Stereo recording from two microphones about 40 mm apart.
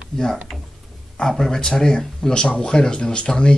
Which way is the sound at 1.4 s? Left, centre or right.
Centre.